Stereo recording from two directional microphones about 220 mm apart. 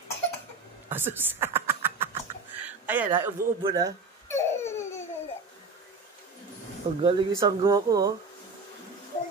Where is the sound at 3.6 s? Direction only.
20° right (ahead or behind).